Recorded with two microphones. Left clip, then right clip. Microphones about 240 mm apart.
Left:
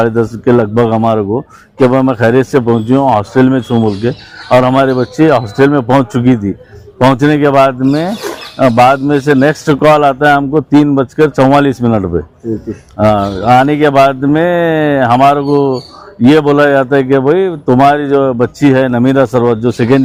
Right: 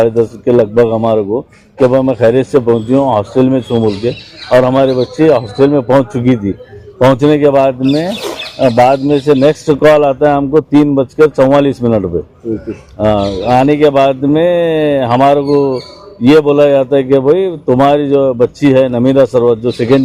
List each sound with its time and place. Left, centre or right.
0.0 s a man's voice: left